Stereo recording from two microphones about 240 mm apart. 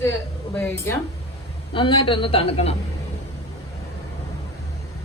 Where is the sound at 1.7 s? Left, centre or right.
Left.